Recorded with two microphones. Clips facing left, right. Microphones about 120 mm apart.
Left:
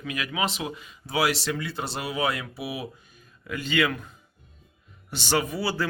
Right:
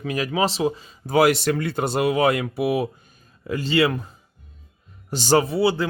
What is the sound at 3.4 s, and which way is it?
Speech, 35° right (ahead or behind).